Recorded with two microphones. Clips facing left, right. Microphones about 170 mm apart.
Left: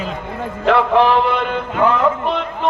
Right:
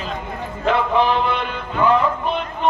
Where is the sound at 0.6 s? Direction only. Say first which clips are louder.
Left 4 dB; 75° left (ahead or behind).